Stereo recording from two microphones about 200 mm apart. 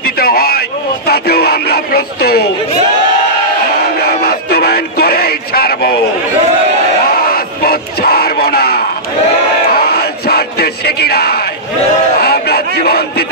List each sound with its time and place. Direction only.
0.0 s radio: 50° left (ahead or behind)
4.0 s music: 50° left (ahead or behind)
7.2 s crowd: 50° left (ahead or behind)
12.2 s a sound: 50° left (ahead or behind)